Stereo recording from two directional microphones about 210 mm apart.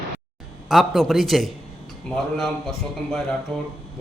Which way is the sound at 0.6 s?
Centre (ahead or behind).